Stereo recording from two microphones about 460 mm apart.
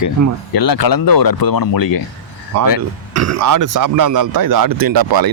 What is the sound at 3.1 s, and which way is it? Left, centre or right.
Speech, right.